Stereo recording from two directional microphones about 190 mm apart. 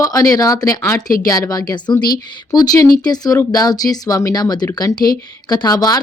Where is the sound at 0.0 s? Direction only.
20° left (ahead or behind).